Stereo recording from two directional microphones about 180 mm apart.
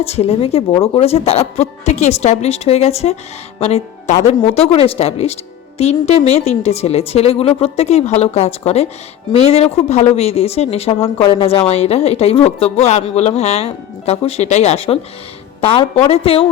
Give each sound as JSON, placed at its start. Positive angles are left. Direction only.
{"t": 0.0, "sound": "speech", "side_deg": 35}